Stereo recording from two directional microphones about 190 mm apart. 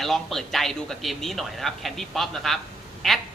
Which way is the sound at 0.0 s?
Centre (ahead or behind).